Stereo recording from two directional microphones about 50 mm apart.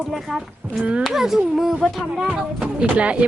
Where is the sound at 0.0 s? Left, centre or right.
Centre.